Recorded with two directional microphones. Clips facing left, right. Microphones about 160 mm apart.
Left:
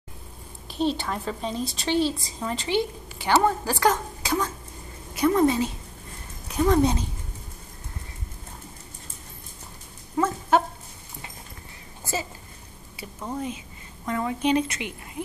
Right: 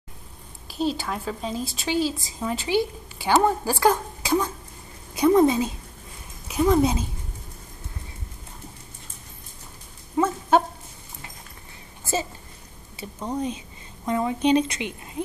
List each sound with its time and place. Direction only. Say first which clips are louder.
0.7 s a woman's voice: even; 5° right (ahead or behind)
10.1 s a sound: right 2 dB; 20° right (ahead or behind)
12.9 s a woman's voice: right 3 dB; 20° right (ahead or behind)